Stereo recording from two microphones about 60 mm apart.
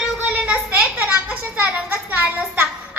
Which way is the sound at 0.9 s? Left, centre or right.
Right.